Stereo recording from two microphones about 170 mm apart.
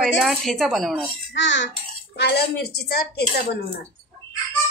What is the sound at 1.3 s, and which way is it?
Speech, 90° left.